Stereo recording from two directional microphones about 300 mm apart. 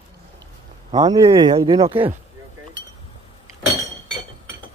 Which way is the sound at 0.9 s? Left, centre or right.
Centre.